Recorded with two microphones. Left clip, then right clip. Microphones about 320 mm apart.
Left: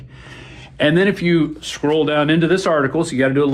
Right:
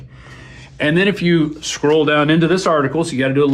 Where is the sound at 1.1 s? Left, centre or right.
Centre.